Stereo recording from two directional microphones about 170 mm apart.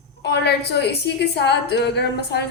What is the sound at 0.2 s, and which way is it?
A woman's voice, 80° left.